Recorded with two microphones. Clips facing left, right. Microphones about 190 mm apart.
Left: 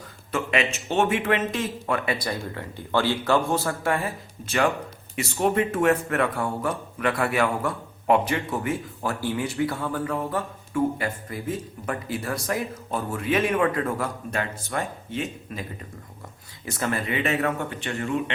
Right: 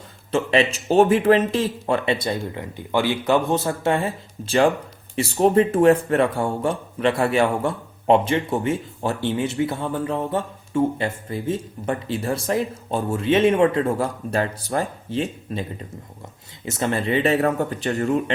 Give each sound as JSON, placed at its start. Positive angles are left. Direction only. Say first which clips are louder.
{"t": 0.3, "sound": "speech", "louder": "right 6 dB", "side_deg": -30}